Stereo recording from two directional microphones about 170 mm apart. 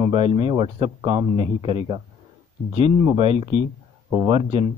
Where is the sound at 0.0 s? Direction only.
30° right (ahead or behind).